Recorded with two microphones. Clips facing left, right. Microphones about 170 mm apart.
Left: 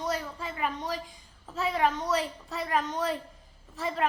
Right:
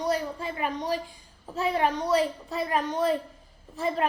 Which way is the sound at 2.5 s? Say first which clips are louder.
Left 2 dB; 10° right (ahead or behind).